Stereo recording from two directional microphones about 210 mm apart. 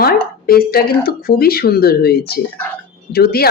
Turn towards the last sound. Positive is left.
turn(degrees=45)  # may be behind; listen again after turning